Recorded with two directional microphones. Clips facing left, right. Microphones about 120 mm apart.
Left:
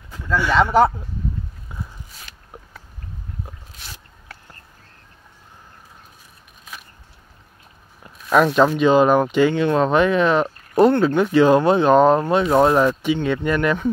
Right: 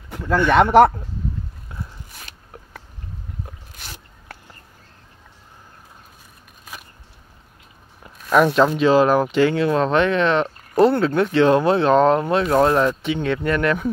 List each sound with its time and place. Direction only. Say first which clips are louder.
0.5 s speech: right 3 dB; 65° right (ahead or behind)
1.7 s a sound: left 1 dB; 5° left (ahead or behind)
8.0 s speech: even; 5° right (ahead or behind)